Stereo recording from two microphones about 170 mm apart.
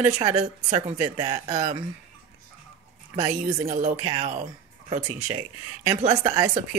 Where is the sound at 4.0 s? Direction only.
30° right (ahead or behind).